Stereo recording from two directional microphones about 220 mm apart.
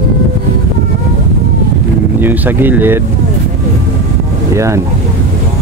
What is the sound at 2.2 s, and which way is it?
Speech, 10° right (ahead or behind).